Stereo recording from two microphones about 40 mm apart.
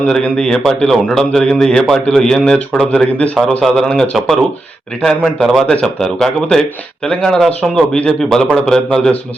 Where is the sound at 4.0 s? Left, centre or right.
Centre.